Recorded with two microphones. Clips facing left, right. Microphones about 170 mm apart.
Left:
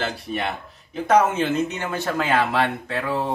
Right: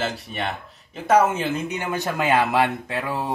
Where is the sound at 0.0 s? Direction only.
Centre (ahead or behind).